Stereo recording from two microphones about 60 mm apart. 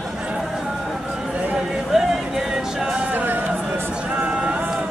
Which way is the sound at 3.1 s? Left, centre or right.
Right.